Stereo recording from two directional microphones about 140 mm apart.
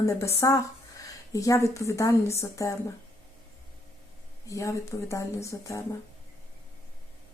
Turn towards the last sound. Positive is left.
turn(degrees=20)  # may be behind; listen again after turning